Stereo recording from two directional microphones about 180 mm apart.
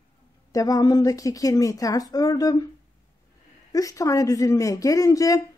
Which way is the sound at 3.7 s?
20° left (ahead or behind).